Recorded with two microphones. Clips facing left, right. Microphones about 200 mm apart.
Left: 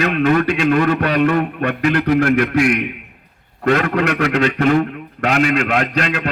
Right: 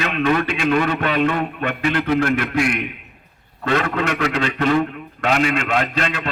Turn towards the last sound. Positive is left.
turn(degrees=45)  # may be behind; listen again after turning